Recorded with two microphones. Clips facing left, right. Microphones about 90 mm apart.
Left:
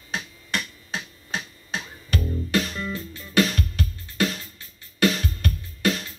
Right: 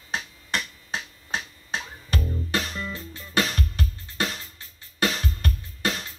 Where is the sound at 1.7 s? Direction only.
30° right (ahead or behind).